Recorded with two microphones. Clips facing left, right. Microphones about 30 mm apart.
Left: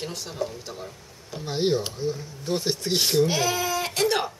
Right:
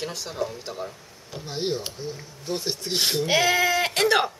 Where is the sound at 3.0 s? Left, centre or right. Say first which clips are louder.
Right 1 dB; centre.